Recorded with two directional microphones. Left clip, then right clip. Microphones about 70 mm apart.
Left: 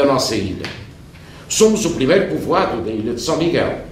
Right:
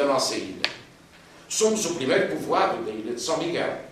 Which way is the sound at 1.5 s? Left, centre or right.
Right.